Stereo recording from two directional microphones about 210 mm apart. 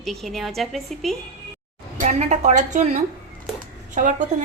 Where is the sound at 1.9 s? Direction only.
35° right (ahead or behind).